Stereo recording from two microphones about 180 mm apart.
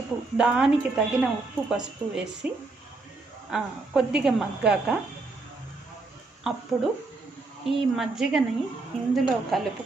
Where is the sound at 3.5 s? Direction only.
5° right (ahead or behind).